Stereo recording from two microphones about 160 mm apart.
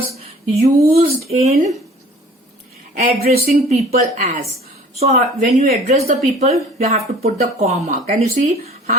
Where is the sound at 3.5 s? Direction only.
45° right (ahead or behind).